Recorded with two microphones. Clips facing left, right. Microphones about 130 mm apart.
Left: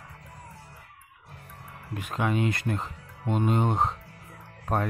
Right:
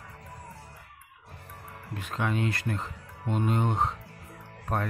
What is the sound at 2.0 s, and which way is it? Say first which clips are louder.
Speech: left 3 dB; 15° left (ahead or behind).